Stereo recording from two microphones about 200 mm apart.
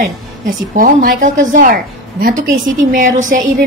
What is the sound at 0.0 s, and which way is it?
A woman's voice, 40° right (ahead or behind).